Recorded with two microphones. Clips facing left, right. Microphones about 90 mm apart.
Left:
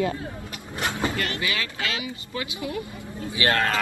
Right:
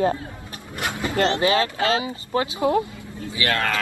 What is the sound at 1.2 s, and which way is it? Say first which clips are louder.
Speech: right 9 dB; 30° right (ahead or behind).